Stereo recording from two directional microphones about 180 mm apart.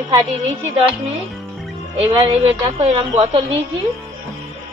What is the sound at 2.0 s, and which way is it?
Speech, 25° right (ahead or behind).